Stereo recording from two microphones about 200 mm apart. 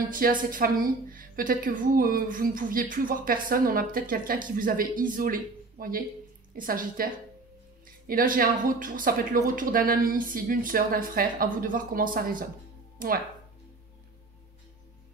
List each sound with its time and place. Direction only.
0.1 s speech: 45° right (ahead or behind)